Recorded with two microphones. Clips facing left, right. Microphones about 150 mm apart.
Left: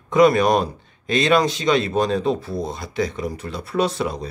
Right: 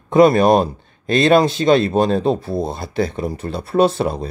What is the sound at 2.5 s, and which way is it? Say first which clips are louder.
Speech: right 4 dB; 30° right (ahead or behind).